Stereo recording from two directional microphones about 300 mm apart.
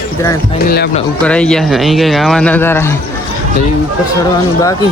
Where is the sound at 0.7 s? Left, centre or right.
Left.